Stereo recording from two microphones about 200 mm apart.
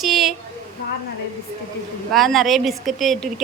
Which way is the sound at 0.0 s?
Centre (ahead or behind).